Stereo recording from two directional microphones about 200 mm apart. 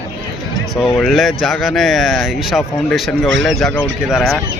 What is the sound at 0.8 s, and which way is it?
Speech, centre (ahead or behind).